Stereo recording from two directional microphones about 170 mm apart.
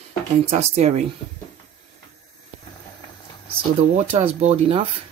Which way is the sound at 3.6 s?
35° right (ahead or behind).